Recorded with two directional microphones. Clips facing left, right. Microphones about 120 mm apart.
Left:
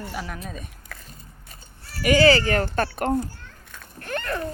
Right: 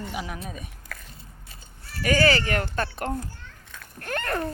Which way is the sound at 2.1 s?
30° left (ahead or behind).